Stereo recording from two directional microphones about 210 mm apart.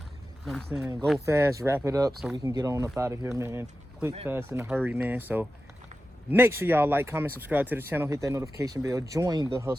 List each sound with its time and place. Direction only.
0.4 s speech: centre (ahead or behind)
1.2 s speech: 15° right (ahead or behind)